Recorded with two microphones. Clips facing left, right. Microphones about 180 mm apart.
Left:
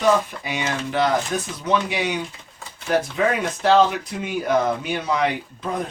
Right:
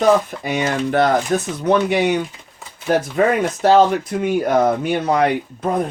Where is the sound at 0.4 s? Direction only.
50° right (ahead or behind).